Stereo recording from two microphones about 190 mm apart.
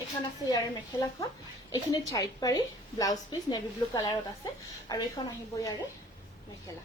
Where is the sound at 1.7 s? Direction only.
20° left (ahead or behind).